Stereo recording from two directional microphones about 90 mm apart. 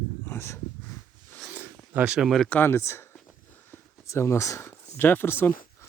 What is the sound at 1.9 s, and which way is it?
Speech, 20° right (ahead or behind).